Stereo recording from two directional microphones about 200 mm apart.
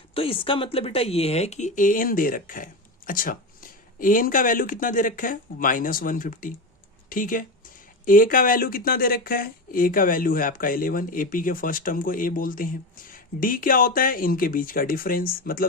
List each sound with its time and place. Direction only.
0.1 s speech: 25° left (ahead or behind); by 15.6 s 45° left (ahead or behind)